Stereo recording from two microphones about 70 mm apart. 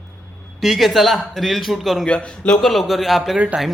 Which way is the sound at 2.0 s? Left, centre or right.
Centre.